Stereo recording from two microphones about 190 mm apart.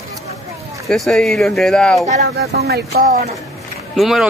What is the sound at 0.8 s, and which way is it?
A man's voice, centre (ahead or behind).